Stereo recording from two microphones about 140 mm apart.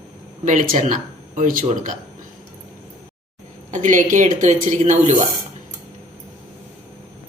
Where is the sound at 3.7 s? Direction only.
65° right (ahead or behind).